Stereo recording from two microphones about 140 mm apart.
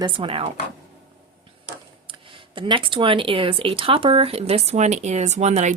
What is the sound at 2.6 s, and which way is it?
Speech, 35° right (ahead or behind).